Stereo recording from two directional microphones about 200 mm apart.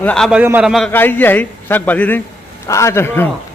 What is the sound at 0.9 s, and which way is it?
A man's voice, 10° left (ahead or behind).